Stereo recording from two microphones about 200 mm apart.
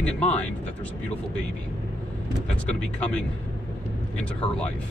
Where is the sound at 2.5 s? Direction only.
5° left (ahead or behind).